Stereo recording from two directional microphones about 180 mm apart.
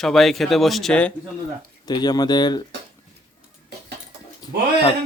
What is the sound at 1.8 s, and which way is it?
Speech, 25° left (ahead or behind).